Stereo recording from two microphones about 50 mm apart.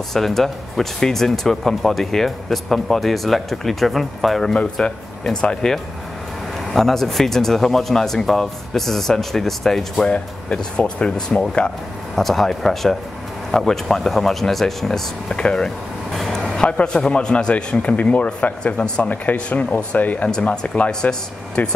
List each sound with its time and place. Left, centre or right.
0.1 s speech: centre
6.7 s speech: centre
10.0 s speech: left
12.2 s speech: centre
15.3 s a sound: centre
16.6 s speech: left
18.8 s speech: centre
19.3 s speech: left